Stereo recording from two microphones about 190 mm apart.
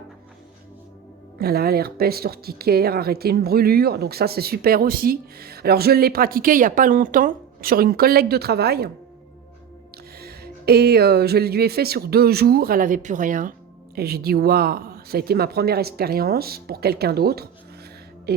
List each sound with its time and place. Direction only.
1.4 s speech: 55° right (ahead or behind)
10.2 s speech: 55° right (ahead or behind)
13.9 s speech: 55° right (ahead or behind)
18.3 s music: 55° right (ahead or behind)